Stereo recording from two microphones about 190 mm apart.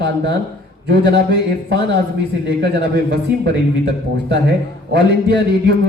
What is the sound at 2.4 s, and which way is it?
Speech, 65° right (ahead or behind).